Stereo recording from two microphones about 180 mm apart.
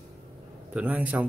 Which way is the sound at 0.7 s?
5° right (ahead or behind).